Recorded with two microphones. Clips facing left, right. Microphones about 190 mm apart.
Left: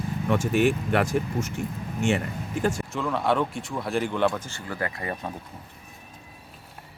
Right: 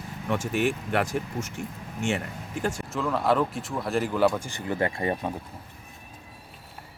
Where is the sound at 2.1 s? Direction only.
90° left.